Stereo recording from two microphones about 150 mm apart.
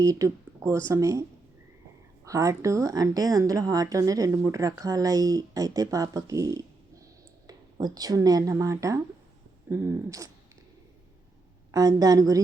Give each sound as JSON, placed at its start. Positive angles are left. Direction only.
{"t": 0.0, "sound": "a woman's voice", "side_deg": -20}
{"t": 2.2, "sound": "a woman's voice", "side_deg": -20}
{"t": 11.7, "sound": "a woman's voice", "side_deg": -25}